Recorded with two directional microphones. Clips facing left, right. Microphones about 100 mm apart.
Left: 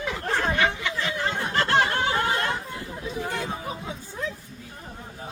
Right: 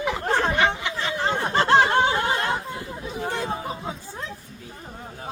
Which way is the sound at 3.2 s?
30° right (ahead or behind).